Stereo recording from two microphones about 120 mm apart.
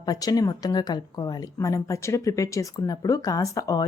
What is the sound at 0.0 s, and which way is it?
Speech, 30° left (ahead or behind).